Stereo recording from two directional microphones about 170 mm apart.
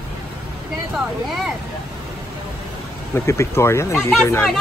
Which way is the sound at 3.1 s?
15° left (ahead or behind).